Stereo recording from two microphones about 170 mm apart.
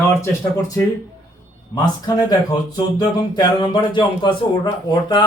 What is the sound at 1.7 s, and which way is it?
Speech, 25° left (ahead or behind).